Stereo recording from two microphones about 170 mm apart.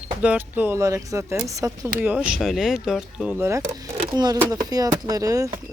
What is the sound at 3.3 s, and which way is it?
Speech, 15° right (ahead or behind).